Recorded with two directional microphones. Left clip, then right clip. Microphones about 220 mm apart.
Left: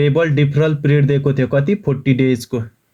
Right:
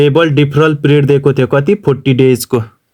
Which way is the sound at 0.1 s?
55° right (ahead or behind).